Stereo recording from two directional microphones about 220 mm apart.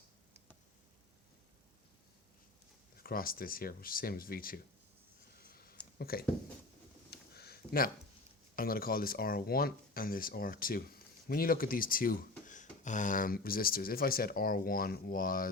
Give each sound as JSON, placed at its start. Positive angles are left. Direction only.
{"t": 3.0, "sound": "speech", "side_deg": 40}
{"t": 5.4, "sound": "a sound", "side_deg": 45}
{"t": 8.5, "sound": "speech", "side_deg": 40}